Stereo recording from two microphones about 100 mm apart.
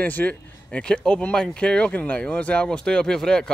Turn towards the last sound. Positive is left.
turn(degrees=5)  # may be behind; listen again after turning